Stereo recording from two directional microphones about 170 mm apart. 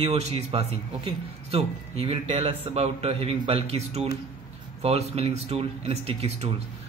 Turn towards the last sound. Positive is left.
turn(degrees=-35)  # may be behind; listen again after turning